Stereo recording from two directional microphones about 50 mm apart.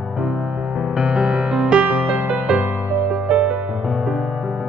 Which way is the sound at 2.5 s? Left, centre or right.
Centre.